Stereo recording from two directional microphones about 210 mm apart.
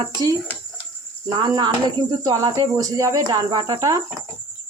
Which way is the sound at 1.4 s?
20° right (ahead or behind).